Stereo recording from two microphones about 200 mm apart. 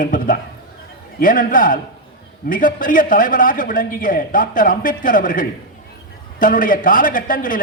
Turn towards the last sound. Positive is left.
turn(degrees=45)  # may be behind; listen again after turning